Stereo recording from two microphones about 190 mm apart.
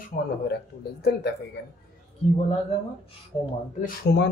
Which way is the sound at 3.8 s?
60° left (ahead or behind).